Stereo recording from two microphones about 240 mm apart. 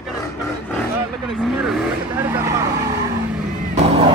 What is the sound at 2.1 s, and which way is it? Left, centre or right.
Vehicle, centre.